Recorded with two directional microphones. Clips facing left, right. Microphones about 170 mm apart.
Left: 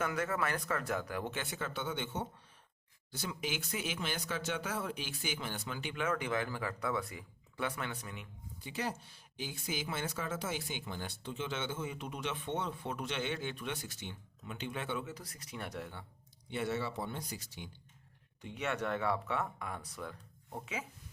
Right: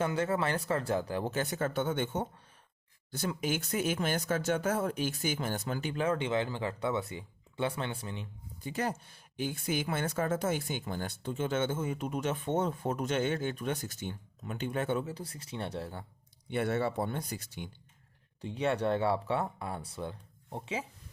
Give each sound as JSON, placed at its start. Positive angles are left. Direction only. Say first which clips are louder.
{"t": 0.0, "sound": "speech", "louder": "right 5 dB", "side_deg": -30}
{"t": 8.6, "sound": "speech", "louder": "right 5 dB", "side_deg": -50}
{"t": 15.1, "sound": "speech", "louder": "right 6 dB", "side_deg": -30}
{"t": 16.5, "sound": "speech", "louder": "right 6 dB", "side_deg": -55}
{"t": 18.4, "sound": "speech", "louder": "right 7 dB", "side_deg": -30}